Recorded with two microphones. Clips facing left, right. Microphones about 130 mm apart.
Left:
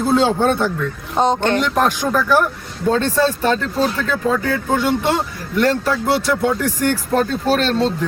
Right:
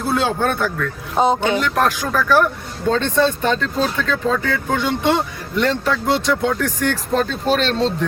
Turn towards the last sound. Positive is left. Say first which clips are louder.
# left 1 dB
turn(degrees=5)  # may be behind; listen again after turning